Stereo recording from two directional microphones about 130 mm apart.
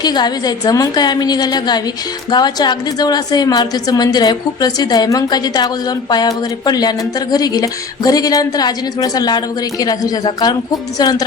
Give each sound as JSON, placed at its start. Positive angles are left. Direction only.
{"t": 0.0, "sound": "a woman's voice", "side_deg": 30}